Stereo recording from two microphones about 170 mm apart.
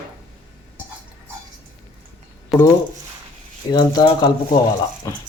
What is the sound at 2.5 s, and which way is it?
Speech, centre (ahead or behind).